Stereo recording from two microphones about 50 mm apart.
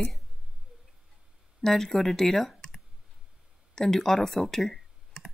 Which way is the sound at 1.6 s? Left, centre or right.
Centre.